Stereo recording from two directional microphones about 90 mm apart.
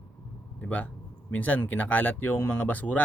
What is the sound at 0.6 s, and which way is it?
Speech, 20° left (ahead or behind).